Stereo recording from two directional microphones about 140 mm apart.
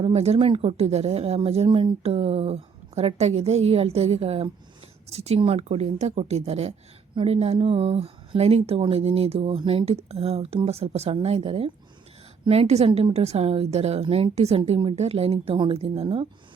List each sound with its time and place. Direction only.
0.0 s speech: 50° right (ahead or behind)